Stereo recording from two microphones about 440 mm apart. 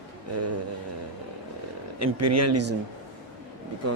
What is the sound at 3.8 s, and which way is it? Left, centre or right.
Speech, right.